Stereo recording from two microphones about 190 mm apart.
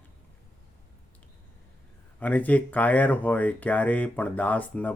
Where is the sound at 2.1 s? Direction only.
10° left (ahead or behind).